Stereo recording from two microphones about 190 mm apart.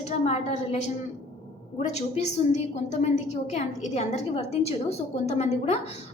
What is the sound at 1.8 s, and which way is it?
A woman's voice, 35° left (ahead or behind).